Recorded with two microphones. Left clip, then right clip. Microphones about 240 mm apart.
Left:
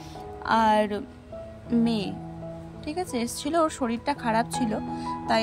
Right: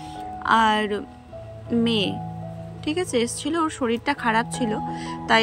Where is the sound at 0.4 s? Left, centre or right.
Centre.